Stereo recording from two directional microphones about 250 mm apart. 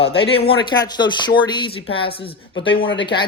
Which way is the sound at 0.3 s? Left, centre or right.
Left.